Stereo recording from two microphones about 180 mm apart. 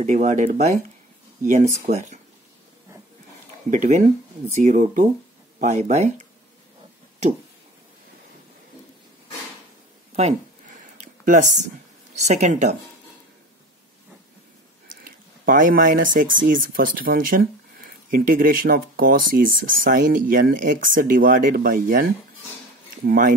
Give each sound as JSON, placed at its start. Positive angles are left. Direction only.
{"t": 0.0, "sound": "speech", "side_deg": -40}
{"t": 3.7, "sound": "speech", "side_deg": -45}
{"t": 10.1, "sound": "a sound", "side_deg": -40}
{"t": 12.2, "sound": "speech", "side_deg": -40}
{"t": 15.0, "sound": "speech", "side_deg": -50}
{"t": 23.0, "sound": "speech", "side_deg": -50}